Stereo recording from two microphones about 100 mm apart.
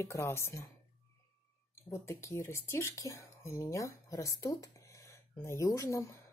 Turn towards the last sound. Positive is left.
turn(degrees=30)  # may be behind; listen again after turning